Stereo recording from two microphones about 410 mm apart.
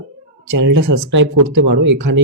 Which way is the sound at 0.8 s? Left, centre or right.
Right.